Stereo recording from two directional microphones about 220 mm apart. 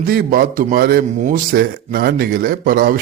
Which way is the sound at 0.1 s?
40° right (ahead or behind).